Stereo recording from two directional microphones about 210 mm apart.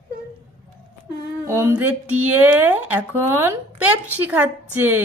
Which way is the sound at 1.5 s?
10° right (ahead or behind).